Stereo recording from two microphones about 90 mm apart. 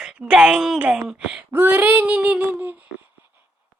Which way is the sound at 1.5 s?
25° right (ahead or behind).